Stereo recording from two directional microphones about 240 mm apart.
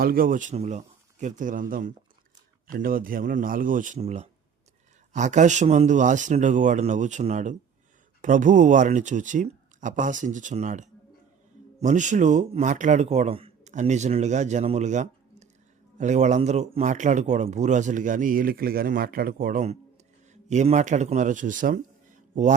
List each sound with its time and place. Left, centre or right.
0.0 s a man's voice: right